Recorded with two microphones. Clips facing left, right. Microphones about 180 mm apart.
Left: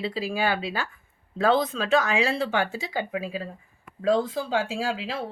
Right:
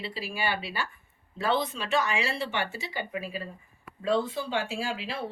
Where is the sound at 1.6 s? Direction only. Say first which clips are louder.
Left 5 dB; 90° left.